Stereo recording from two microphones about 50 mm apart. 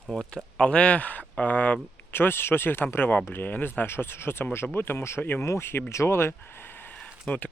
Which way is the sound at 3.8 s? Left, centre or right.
Left.